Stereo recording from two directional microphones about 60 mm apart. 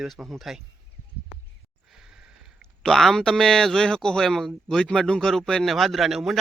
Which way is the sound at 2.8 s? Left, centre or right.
Centre.